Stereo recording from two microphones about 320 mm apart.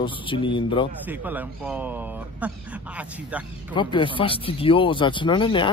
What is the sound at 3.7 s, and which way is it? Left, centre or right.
Speech, centre.